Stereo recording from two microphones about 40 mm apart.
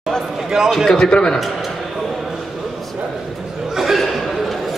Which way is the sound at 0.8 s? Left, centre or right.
Centre.